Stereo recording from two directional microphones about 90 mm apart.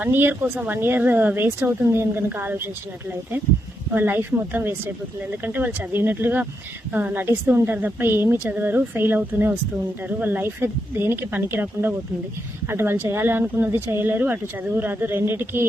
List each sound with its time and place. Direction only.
0.0 s a woman's voice: 20° right (ahead or behind)
3.9 s a woman's voice: 20° right (ahead or behind)